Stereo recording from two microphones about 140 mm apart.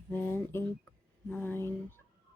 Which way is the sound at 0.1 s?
15° left (ahead or behind).